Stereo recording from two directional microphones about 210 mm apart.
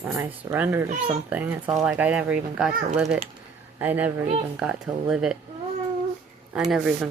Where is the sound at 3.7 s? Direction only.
10° right (ahead or behind).